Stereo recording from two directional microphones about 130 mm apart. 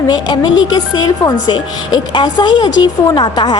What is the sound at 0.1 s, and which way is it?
A woman's voice, 30° left (ahead or behind).